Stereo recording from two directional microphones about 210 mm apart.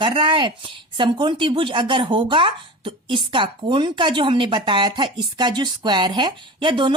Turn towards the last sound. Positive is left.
turn(degrees=-25)  # may be behind; listen again after turning